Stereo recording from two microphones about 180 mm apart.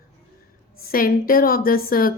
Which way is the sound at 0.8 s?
55° left (ahead or behind).